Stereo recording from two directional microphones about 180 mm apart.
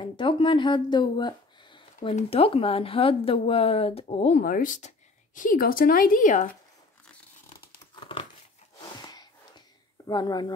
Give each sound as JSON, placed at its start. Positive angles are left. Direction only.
{"t": 0.0, "sound": "speech", "side_deg": 25}
{"t": 2.0, "sound": "speech", "side_deg": 40}
{"t": 7.9, "sound": "crumpling", "side_deg": 25}
{"t": 9.0, "sound": "a sound", "side_deg": 20}
{"t": 10.0, "sound": "speech", "side_deg": 20}